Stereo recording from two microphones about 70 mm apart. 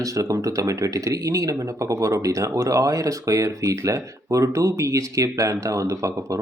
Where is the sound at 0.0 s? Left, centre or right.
Right.